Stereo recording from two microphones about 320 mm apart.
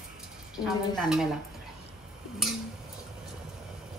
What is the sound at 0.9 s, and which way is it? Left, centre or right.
Dishes, centre.